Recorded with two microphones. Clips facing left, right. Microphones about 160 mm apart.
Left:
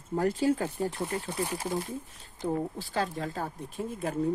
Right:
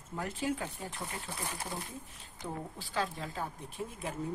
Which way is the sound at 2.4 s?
40° left (ahead or behind).